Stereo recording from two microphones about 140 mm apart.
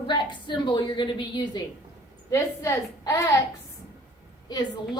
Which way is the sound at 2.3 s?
20° left (ahead or behind).